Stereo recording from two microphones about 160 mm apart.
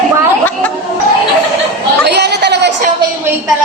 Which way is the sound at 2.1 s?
90° right.